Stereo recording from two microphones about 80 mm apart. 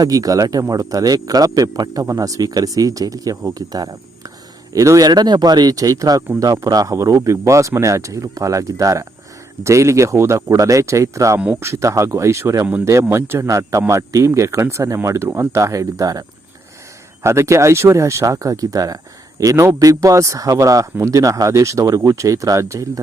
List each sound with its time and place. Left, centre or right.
0.0 s speech: right
17.2 s speech: right